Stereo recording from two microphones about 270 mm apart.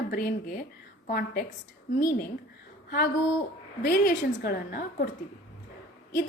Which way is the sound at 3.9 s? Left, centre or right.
Left.